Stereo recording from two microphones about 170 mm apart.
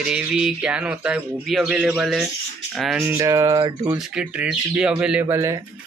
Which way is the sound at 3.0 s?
15° right (ahead or behind).